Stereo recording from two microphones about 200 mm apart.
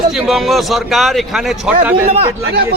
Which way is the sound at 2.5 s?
50° right (ahead or behind).